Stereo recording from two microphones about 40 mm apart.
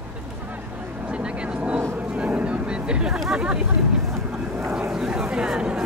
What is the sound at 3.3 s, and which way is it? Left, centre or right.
Hubbub, right.